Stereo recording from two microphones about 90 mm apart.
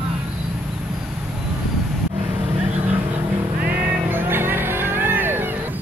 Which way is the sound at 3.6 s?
25° right (ahead or behind).